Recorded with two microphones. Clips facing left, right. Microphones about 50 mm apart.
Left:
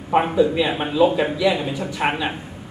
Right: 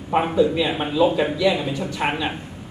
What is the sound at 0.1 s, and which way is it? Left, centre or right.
Speech, centre.